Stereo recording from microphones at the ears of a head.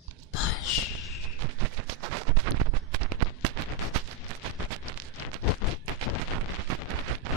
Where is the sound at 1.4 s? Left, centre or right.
Right.